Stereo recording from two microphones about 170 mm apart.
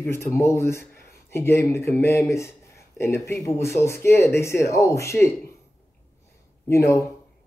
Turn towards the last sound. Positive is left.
turn(degrees=15)  # may be behind; listen again after turning